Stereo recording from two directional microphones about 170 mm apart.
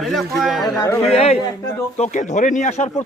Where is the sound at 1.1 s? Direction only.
35° left (ahead or behind).